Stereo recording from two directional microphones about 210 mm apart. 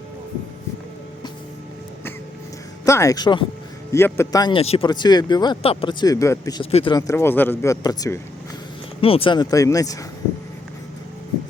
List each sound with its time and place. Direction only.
2.8 s speech: 15° left (ahead or behind)